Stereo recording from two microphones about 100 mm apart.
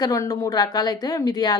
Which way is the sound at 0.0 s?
35° left (ahead or behind).